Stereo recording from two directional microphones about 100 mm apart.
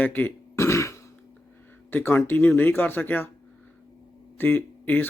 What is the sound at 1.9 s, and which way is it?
Speech, 20° left (ahead or behind).